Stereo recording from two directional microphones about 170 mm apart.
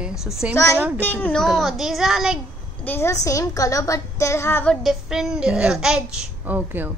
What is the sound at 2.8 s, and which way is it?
A woman's voice, 15° left (ahead or behind).